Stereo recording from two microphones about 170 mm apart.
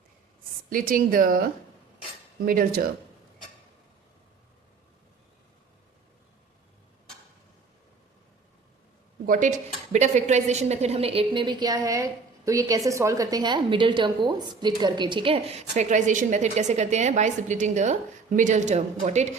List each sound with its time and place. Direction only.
0.7 s speech: 55° right (ahead or behind)
9.2 s a woman's voice: 50° right (ahead or behind)